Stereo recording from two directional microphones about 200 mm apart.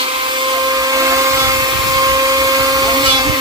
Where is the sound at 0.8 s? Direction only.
15° right (ahead or behind).